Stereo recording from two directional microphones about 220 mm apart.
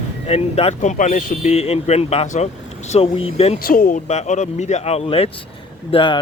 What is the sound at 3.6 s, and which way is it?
Speech, 40° left (ahead or behind).